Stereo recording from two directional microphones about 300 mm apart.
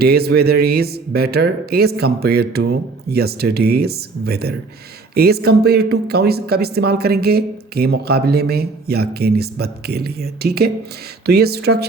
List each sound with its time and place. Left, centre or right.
0.0 s speech: right